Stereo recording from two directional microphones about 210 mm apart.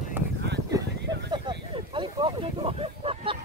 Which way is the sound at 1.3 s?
20° right (ahead or behind).